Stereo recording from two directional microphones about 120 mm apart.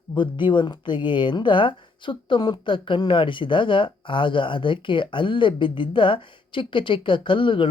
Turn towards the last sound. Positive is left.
turn(degrees=45)  # may be behind; listen again after turning